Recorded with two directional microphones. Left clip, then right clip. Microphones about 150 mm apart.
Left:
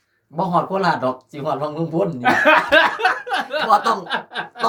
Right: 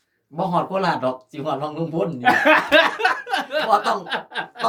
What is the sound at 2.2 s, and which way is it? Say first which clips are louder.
Speech: left 1 dB; 20° right (ahead or behind).